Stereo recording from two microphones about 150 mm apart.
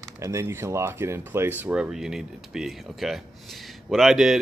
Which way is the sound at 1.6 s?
5° right (ahead or behind).